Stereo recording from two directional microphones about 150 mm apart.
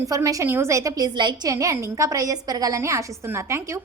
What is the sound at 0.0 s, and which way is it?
A woman's voice, 20° right (ahead or behind).